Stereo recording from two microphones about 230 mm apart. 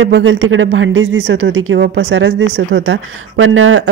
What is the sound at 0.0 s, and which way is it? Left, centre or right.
Speech, right.